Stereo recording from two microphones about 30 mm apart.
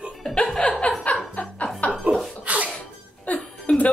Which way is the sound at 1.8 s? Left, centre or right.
Left.